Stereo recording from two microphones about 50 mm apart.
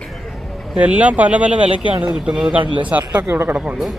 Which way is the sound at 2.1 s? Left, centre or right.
Centre.